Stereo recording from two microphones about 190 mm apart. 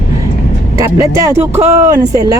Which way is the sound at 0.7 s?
15° right (ahead or behind).